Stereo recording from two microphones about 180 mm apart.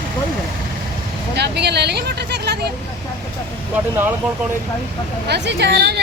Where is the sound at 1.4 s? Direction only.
65° right (ahead or behind).